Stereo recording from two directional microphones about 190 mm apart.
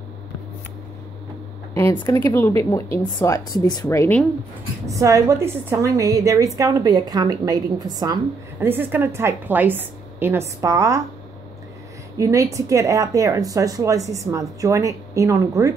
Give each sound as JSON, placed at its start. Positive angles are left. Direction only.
{"t": 1.7, "sound": "speech", "side_deg": 15}
{"t": 4.8, "sound": "a woman's voice", "side_deg": -15}
{"t": 12.2, "sound": "a woman's voice", "side_deg": -15}